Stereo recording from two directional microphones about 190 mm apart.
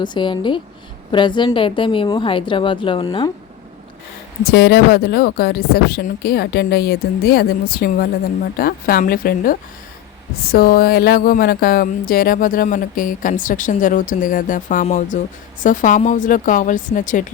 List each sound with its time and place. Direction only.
0.0 s a woman's voice: 25° left (ahead or behind)
4.4 s speech: 55° left (ahead or behind)
8.5 s a sound: 50° left (ahead or behind)